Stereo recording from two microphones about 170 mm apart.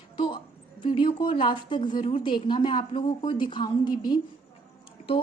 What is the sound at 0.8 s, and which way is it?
A woman's voice, 30° left (ahead or behind).